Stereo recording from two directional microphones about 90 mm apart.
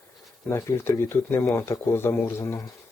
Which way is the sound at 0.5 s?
25° left (ahead or behind).